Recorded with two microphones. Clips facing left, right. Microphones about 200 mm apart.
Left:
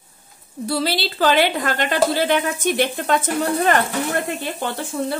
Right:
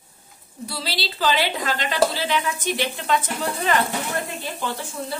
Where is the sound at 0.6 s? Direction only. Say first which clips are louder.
Left 8 dB; 55° left (ahead or behind).